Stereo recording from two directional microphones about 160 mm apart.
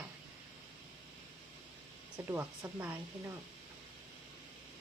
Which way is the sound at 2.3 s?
10° right (ahead or behind).